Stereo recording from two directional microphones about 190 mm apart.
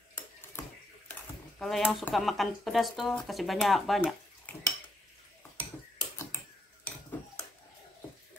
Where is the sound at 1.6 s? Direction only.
Centre (ahead or behind).